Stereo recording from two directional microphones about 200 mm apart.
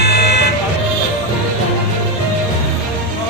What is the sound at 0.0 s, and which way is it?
Vehicle, 55° left (ahead or behind).